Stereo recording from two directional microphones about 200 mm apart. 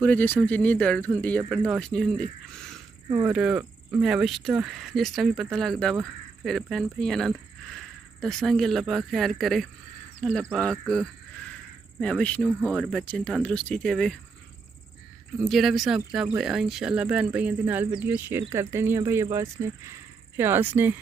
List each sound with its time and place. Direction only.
0.0 s speech: 10° left (ahead or behind)
3.1 s speech: 20° right (ahead or behind)
3.3 s speech: 5° right (ahead or behind)
12.4 s speech: 5° right (ahead or behind)
15.4 s speech: centre (ahead or behind)